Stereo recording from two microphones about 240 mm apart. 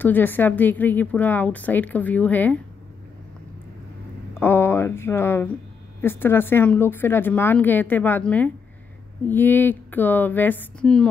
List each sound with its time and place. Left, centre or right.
0.0 s a woman's voice: centre
4.3 s a woman's voice: centre